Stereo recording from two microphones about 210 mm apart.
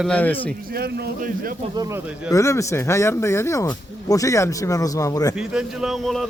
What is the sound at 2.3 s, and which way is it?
A man's voice, 15° left (ahead or behind).